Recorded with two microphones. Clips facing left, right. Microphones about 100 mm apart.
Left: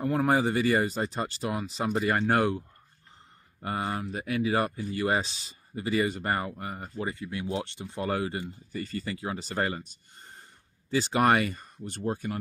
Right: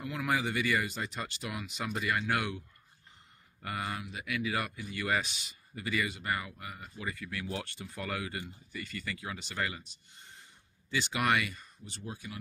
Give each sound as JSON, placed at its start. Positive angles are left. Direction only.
{"t": 0.0, "sound": "speech", "side_deg": 40}
{"t": 3.6, "sound": "speech", "side_deg": 30}
{"t": 7.1, "sound": "speech", "side_deg": 25}